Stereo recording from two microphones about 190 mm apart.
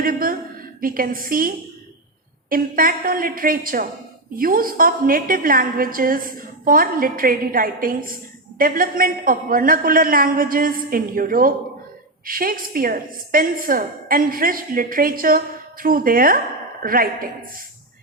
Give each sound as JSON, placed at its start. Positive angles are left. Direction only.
{"t": 0.0, "sound": "a woman's voice", "side_deg": -50}